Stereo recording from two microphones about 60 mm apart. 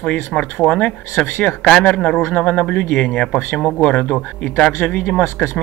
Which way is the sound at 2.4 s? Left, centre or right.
Centre.